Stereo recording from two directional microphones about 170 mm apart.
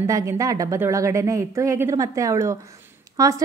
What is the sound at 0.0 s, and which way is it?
Speech, 15° right (ahead or behind).